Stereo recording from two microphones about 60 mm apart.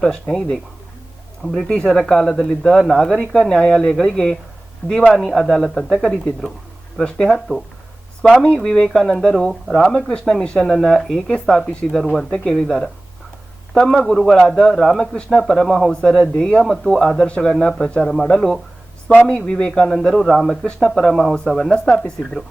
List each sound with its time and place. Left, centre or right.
0.0 s speech: centre
1.7 s a man's voice: centre
8.9 s a man's voice: centre
9.9 s speech: centre
10.6 s a man's voice: centre
16.7 s a man's voice: centre
17.8 s a man's voice: centre